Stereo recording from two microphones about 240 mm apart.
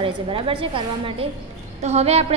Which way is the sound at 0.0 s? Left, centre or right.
Right.